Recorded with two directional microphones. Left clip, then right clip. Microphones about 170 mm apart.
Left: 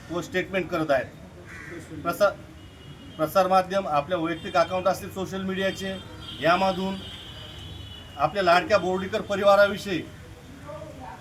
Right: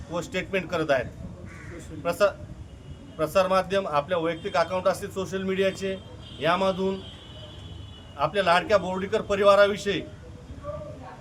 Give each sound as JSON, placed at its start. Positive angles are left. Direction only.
{"t": 0.2, "sound": "a man's voice", "side_deg": -20}
{"t": 2.0, "sound": "a man's voice", "side_deg": -20}
{"t": 8.2, "sound": "a man's voice", "side_deg": -20}